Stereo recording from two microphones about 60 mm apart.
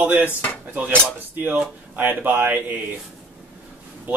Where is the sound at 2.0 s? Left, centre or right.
Right.